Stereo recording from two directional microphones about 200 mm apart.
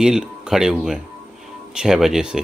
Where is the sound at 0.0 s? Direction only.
5° right (ahead or behind).